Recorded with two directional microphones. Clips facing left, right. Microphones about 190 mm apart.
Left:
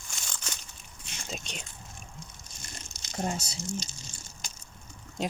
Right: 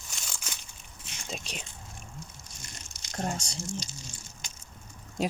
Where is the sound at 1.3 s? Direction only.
5° right (ahead or behind).